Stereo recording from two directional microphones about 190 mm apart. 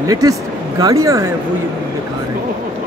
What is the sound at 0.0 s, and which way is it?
Speech, 20° right (ahead or behind).